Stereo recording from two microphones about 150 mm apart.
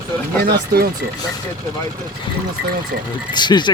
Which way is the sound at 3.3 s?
30° left (ahead or behind).